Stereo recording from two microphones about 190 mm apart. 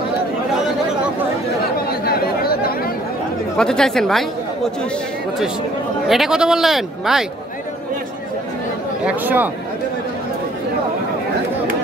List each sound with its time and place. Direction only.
1.9 s chatter: 55° left (ahead or behind)
3.5 s speech: 5° left (ahead or behind)
6.0 s speech: centre (ahead or behind)
9.0 s speech: 10° right (ahead or behind)